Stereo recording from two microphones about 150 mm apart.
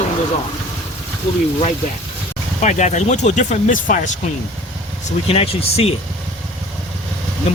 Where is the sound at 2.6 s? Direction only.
50° left (ahead or behind).